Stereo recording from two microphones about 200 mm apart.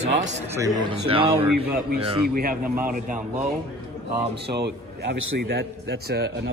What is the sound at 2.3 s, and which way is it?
Speech, 45° right (ahead or behind).